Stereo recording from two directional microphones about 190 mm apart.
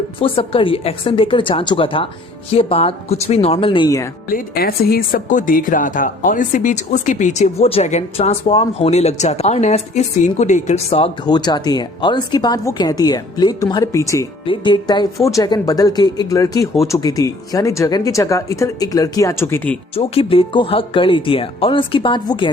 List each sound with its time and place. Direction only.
0.2 s speech: 30° left (ahead or behind)
4.3 s speech: 50° left (ahead or behind); by 19.8 s 10° left (ahead or behind)
20.0 s speech: 30° left (ahead or behind)